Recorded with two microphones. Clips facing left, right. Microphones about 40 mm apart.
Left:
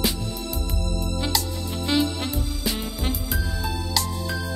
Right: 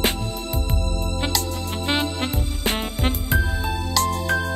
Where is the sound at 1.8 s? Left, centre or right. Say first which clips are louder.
Left 1 dB; right.